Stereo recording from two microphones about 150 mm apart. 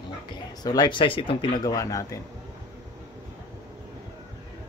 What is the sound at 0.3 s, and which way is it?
Speech, 30° left (ahead or behind).